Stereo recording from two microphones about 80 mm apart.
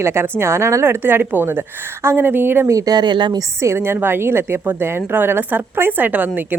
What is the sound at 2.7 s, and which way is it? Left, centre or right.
Speech, right.